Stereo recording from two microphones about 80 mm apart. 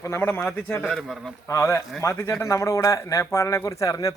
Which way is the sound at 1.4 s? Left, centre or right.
Left.